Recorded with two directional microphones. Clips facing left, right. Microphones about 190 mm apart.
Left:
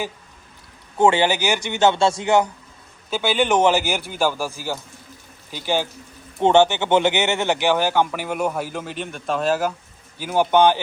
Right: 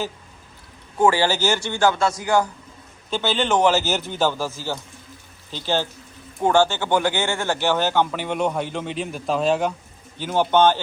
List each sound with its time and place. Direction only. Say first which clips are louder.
0.9 s a man's voice: left 1 dB; 25° left (ahead or behind)
3.1 s speech: left 2 dB; 10° left (ahead or behind)